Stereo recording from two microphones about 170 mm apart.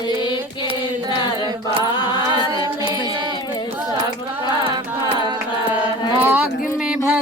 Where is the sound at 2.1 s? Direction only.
25° right (ahead or behind).